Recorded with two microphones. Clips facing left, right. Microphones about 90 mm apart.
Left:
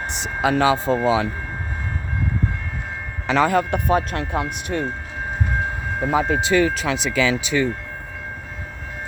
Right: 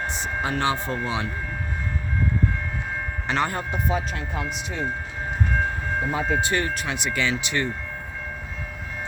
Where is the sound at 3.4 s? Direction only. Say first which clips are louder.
Left 8 dB; 75° left (ahead or behind); by 4.8 s 60° left (ahead or behind).